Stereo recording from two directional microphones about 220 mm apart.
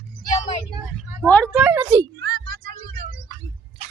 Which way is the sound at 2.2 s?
40° right (ahead or behind).